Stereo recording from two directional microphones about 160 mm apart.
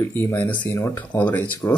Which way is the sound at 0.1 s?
15° left (ahead or behind).